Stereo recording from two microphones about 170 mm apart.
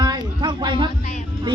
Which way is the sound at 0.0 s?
25° right (ahead or behind).